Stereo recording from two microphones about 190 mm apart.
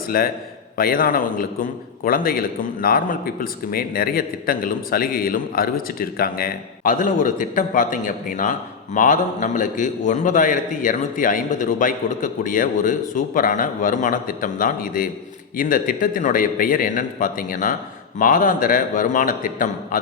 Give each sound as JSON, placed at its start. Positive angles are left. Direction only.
{"t": 0.1, "sound": "a man's voice", "side_deg": 50}